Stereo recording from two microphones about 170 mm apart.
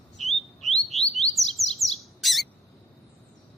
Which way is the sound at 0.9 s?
Centre (ahead or behind).